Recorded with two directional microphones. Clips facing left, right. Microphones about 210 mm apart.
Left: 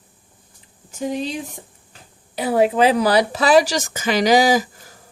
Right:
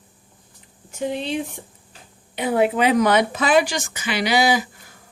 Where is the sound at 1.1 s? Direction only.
40° left (ahead or behind).